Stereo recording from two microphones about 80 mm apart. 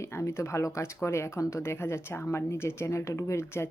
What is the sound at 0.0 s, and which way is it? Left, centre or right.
Speech, left.